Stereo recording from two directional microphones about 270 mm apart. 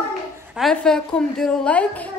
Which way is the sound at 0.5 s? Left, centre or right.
Centre.